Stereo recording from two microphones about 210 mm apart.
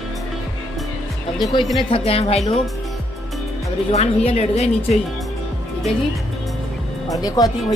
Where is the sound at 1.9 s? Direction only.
30° left (ahead or behind).